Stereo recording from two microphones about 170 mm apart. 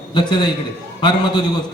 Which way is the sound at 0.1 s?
25° left (ahead or behind).